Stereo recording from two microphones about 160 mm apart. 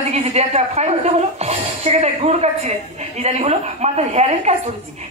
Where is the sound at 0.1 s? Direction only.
45° right (ahead or behind).